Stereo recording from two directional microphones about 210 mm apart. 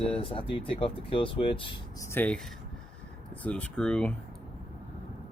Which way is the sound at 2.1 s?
10° left (ahead or behind).